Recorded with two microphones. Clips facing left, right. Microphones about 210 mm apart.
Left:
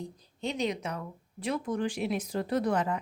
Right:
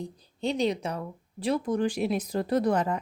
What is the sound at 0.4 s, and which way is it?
Speech, 30° right (ahead or behind).